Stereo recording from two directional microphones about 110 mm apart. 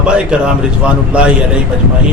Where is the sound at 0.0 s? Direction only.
10° right (ahead or behind).